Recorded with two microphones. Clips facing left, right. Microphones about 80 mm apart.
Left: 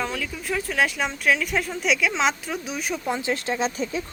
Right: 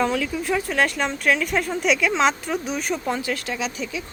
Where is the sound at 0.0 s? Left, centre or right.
Centre.